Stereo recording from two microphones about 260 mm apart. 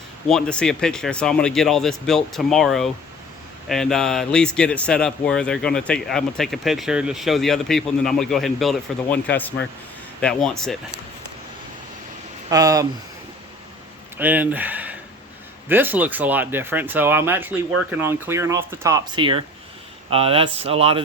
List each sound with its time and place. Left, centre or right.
0.3 s speech: centre
12.5 s speech: centre
14.2 s speech: centre; by 21.0 s right